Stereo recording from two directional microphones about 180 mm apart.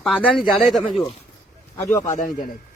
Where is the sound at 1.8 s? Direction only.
15° left (ahead or behind).